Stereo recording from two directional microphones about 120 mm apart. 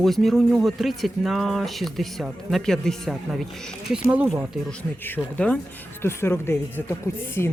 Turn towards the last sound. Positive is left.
turn(degrees=20)  # may be behind; listen again after turning